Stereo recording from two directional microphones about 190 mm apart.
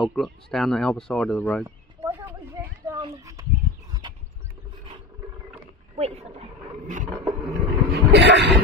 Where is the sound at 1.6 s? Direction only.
15° right (ahead or behind).